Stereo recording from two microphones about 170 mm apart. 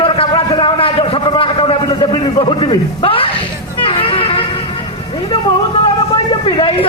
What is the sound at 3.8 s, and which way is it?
Vehicle, 30° left (ahead or behind).